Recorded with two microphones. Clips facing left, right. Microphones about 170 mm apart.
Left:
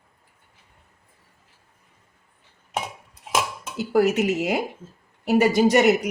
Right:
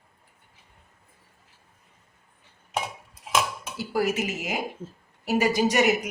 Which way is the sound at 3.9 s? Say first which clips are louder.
Left 7 dB; 65° left (ahead or behind).